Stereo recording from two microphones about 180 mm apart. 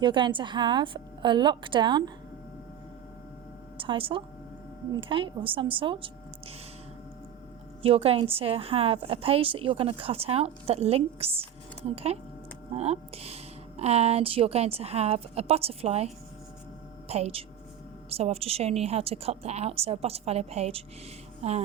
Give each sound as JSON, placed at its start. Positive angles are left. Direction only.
{"t": 0.0, "sound": "a woman's voice", "side_deg": -25}
{"t": 3.8, "sound": "a woman's voice", "side_deg": -30}
{"t": 7.8, "sound": "a woman's voice", "side_deg": -30}